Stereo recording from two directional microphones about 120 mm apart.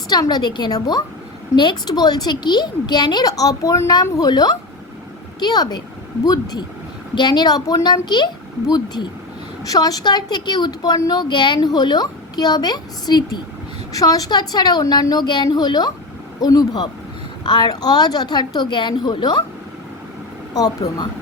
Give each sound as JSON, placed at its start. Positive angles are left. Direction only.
{"t": 0.1, "sound": "a woman's voice", "side_deg": 35}
{"t": 20.5, "sound": "a woman's voice", "side_deg": 30}